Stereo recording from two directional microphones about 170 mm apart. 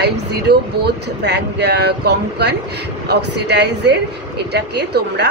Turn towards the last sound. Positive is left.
turn(degrees=-80)